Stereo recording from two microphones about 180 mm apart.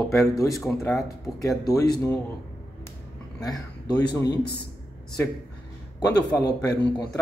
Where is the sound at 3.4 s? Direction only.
20° left (ahead or behind).